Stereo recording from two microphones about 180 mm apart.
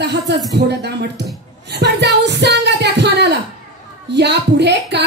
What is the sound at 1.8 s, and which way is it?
Speech, 70° right (ahead or behind).